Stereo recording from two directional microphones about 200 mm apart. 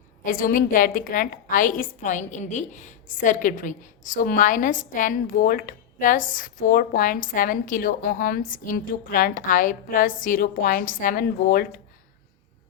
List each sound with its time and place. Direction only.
0.3 s a woman's voice: 45° left (ahead or behind)